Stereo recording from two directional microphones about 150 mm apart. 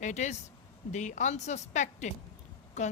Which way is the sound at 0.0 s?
50° left (ahead or behind).